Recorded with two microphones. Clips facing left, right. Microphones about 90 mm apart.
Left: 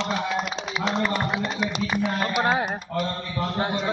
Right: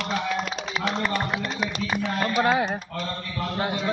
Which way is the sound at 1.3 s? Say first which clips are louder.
Left 2 dB; 15° left (ahead or behind).